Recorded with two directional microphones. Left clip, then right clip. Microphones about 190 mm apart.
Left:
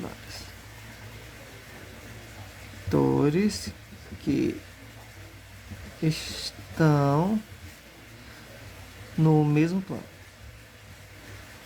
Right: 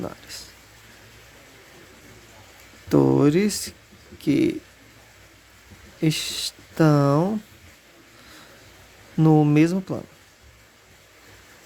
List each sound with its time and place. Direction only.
2.9 s speech: 50° right (ahead or behind)
6.1 s speech: 45° right (ahead or behind)
9.1 s speech: 45° right (ahead or behind)